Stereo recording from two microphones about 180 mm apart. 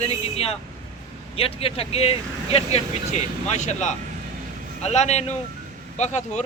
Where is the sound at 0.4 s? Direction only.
35° left (ahead or behind).